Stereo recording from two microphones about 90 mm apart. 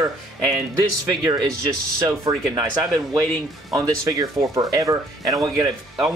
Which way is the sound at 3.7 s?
40° right (ahead or behind).